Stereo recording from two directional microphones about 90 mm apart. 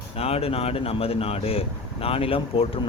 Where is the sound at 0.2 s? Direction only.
90° left.